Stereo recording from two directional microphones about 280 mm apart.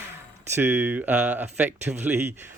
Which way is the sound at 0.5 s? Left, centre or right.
Centre.